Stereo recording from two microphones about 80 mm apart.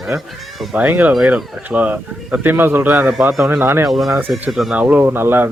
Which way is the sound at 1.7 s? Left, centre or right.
Centre.